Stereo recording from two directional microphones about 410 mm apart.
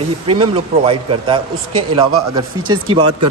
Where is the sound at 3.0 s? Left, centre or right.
Right.